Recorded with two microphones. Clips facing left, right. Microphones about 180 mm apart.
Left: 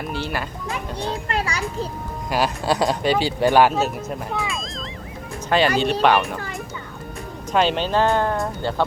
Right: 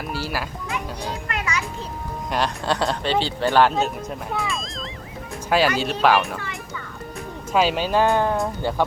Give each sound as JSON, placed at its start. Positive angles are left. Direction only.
{"t": 0.1, "sound": "speech", "side_deg": -5}
{"t": 1.3, "sound": "a child's voice", "side_deg": 35}
{"t": 2.3, "sound": "speech", "side_deg": 10}
{"t": 7.5, "sound": "speech", "side_deg": -5}